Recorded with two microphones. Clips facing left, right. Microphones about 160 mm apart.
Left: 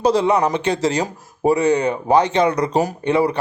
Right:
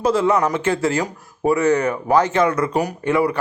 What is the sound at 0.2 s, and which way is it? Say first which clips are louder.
Speech: left 1 dB; 20° left (ahead or behind).